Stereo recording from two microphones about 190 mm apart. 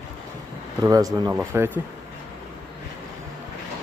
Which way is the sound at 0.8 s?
20° right (ahead or behind).